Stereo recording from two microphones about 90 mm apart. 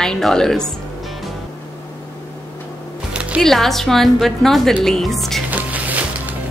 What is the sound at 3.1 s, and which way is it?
Music, 15° right (ahead or behind).